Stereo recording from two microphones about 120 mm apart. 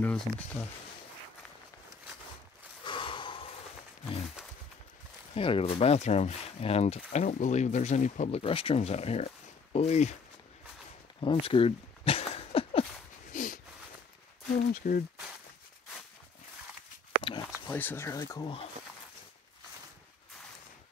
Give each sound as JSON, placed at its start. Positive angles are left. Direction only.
{"t": 0.0, "sound": "speech", "side_deg": 15}
{"t": 2.8, "sound": "gasp", "side_deg": 45}
{"t": 5.3, "sound": "speech", "side_deg": 50}
{"t": 7.1, "sound": "speech", "side_deg": 80}
{"t": 11.1, "sound": "a sound", "side_deg": 50}
{"t": 13.3, "sound": "a sound", "side_deg": 90}
{"t": 14.8, "sound": "speech", "side_deg": 90}
{"t": 17.2, "sound": "a sound", "side_deg": 40}
{"t": 17.6, "sound": "speech", "side_deg": 15}